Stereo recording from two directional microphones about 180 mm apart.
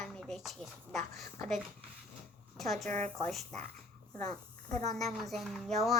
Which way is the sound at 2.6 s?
Centre (ahead or behind).